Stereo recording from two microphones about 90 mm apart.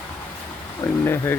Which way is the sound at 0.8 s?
30° left (ahead or behind).